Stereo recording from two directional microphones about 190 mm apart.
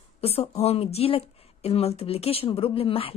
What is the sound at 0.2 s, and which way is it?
Speech, 30° left (ahead or behind).